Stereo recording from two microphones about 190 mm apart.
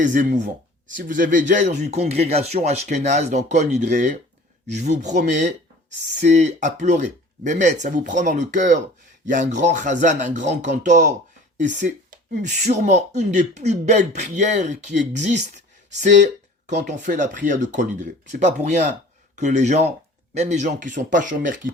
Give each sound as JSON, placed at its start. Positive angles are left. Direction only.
{"t": 0.0, "sound": "speech", "side_deg": -45}